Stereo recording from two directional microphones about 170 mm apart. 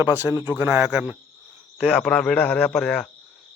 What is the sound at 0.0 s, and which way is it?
Speech, 15° right (ahead or behind).